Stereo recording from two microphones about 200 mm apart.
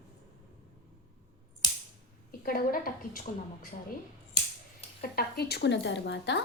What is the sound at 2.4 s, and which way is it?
Speech, 45° left (ahead or behind).